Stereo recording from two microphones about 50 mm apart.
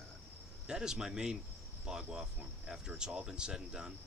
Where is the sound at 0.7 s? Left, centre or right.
Centre.